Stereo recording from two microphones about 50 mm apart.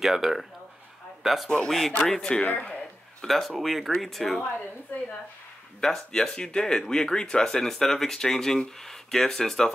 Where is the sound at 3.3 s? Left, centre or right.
Centre.